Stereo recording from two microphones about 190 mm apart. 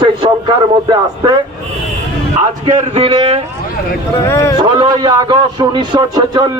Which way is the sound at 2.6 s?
35° right (ahead or behind).